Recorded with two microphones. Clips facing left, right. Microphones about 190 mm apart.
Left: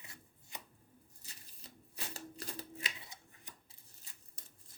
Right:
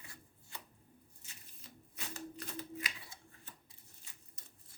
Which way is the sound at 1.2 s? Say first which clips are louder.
Left 1 dB; 35° left (ahead or behind).